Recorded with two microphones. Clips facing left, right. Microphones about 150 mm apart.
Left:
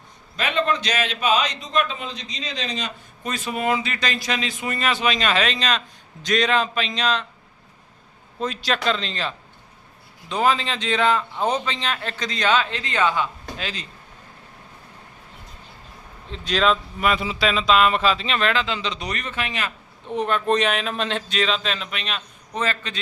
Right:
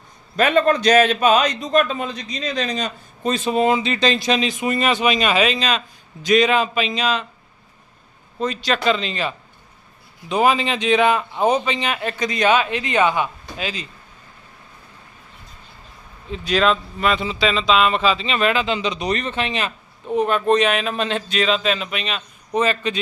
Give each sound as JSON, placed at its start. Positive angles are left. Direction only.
{"t": 0.3, "sound": "a man's voice", "side_deg": -50}
{"t": 3.2, "sound": "a man's voice", "side_deg": -25}
{"t": 8.4, "sound": "a man's voice", "side_deg": 0}
{"t": 16.3, "sound": "speech", "side_deg": -5}
{"t": 17.0, "sound": "speech", "side_deg": 5}
{"t": 19.0, "sound": "speech", "side_deg": -25}
{"t": 20.1, "sound": "speech", "side_deg": -5}
{"t": 22.5, "sound": "a man's voice", "side_deg": -15}